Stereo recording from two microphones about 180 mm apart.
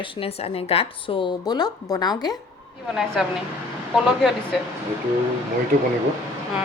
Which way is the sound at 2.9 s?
Centre (ahead or behind).